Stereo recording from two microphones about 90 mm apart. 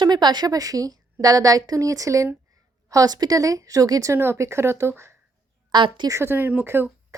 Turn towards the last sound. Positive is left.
turn(degrees=-25)  # may be behind; listen again after turning